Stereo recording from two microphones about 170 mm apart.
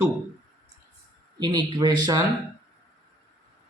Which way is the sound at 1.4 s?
25° right (ahead or behind).